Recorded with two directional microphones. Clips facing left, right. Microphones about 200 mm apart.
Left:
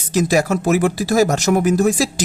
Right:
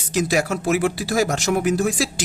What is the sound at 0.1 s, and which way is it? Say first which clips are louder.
Speech: left 4 dB; 40° left (ahead or behind).